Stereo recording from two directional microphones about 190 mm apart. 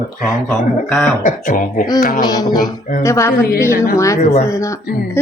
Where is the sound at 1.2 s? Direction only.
45° left (ahead or behind).